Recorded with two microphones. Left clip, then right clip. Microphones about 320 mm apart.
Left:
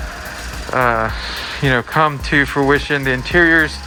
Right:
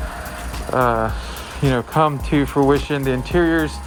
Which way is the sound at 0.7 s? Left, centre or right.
Centre.